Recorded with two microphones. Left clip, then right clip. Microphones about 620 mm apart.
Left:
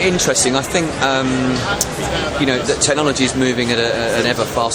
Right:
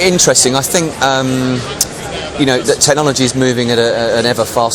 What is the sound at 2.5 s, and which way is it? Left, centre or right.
A man's voice, right.